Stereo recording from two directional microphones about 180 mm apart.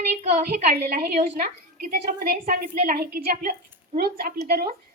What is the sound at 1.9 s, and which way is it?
A woman's voice, 55° right (ahead or behind).